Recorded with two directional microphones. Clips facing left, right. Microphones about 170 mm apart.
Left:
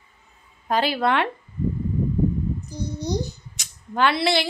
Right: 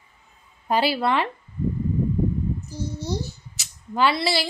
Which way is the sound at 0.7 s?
10° right (ahead or behind).